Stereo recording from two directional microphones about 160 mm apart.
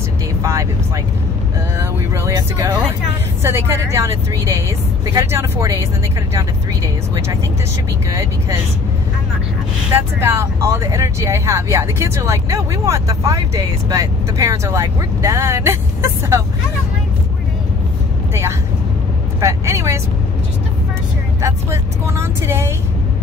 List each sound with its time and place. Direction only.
0.4 s music: 20° right (ahead or behind)
1.8 s speech: 20° right (ahead or behind)
8.1 s speech: 20° right (ahead or behind)
10.2 s speech: 15° right (ahead or behind)
19.4 s speech: 15° right (ahead or behind)
21.4 s speech: 15° right (ahead or behind)